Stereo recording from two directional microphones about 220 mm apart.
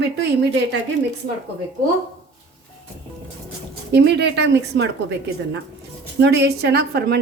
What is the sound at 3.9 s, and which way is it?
A woman's voice, 50° right (ahead or behind).